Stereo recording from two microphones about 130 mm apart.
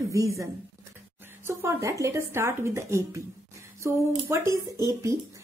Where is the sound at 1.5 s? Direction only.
20° right (ahead or behind).